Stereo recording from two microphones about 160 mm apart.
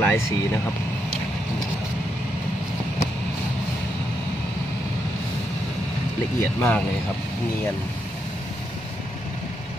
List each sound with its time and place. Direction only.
0.0 s speech: 15° left (ahead or behind)
6.4 s speech: 15° left (ahead or behind)